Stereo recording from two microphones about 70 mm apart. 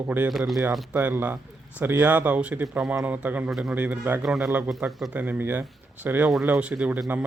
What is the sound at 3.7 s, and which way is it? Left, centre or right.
Speech, right.